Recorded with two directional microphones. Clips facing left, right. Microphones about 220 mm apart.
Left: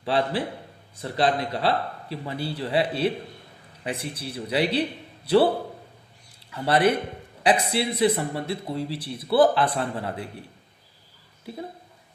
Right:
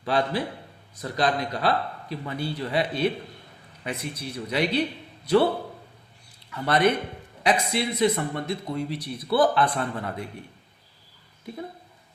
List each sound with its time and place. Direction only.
0.0 s a man's voice: 30° left (ahead or behind)
6.5 s speech: 30° left (ahead or behind)
11.5 s a man's voice: 30° left (ahead or behind)